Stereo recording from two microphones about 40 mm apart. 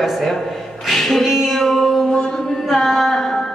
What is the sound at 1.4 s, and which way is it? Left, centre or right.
Music, centre.